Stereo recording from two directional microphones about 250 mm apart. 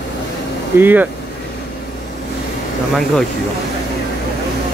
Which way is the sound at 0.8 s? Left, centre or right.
Centre.